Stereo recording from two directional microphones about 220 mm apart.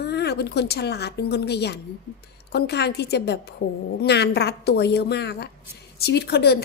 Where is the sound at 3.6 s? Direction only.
65° left (ahead or behind).